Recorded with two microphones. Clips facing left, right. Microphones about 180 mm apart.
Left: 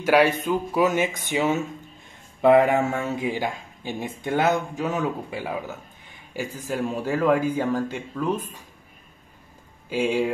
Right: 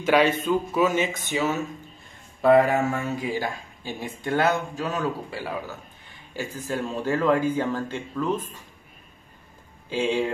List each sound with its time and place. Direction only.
0.0 s speech: 10° left (ahead or behind)
9.8 s speech: 10° left (ahead or behind)